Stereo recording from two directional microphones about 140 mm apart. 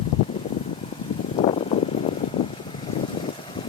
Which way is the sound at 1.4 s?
45° left (ahead or behind).